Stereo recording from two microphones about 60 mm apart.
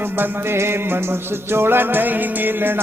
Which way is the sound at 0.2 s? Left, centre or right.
Right.